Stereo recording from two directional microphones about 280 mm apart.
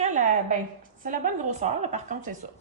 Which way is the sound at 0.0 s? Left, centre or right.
Right.